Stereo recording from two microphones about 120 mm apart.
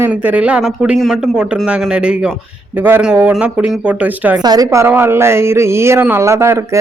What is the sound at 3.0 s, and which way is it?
A man's voice, 10° right (ahead or behind).